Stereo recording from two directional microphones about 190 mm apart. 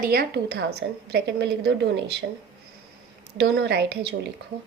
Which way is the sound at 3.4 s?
60° right (ahead or behind).